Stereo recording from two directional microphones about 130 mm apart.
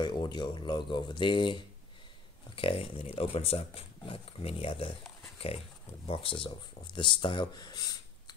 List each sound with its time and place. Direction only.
0.0 s speech: 35° left (ahead or behind)
6.0 s speech: 45° left (ahead or behind)